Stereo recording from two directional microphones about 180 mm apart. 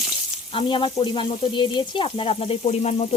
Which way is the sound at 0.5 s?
30° left (ahead or behind).